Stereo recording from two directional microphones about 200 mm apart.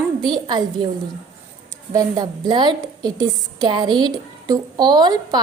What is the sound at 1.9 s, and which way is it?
A woman's voice, 20° right (ahead or behind).